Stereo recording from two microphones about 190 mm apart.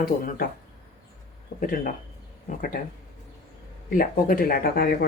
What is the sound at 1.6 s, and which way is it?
Speech, 50° left (ahead or behind).